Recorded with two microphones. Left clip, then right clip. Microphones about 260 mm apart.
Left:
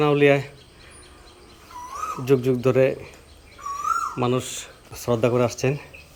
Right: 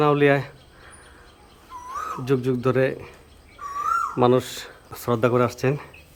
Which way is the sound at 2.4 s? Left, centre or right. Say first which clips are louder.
Left 1 dB; centre.